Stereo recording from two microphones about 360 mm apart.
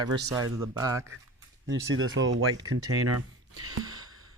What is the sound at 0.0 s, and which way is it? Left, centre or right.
A man's voice, centre.